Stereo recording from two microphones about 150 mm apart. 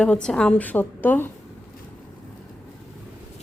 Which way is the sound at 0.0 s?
5° left (ahead or behind).